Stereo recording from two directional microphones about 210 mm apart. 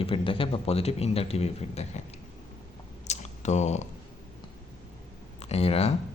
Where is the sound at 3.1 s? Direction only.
35° left (ahead or behind).